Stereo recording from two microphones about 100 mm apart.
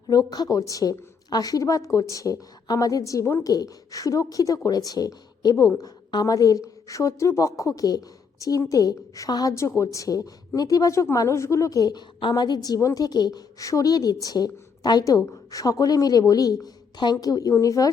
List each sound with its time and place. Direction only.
0.1 s a woman's voice: 40° left (ahead or behind)